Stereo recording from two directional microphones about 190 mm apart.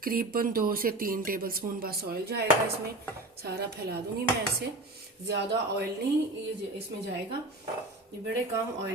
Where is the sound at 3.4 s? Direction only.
55° right (ahead or behind).